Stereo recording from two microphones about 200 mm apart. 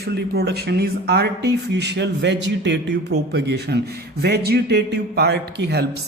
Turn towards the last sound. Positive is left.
turn(degrees=-55)  # may be behind; listen again after turning